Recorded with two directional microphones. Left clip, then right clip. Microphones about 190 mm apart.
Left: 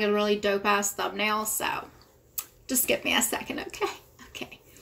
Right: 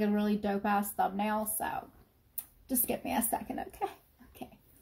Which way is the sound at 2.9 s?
25° right (ahead or behind).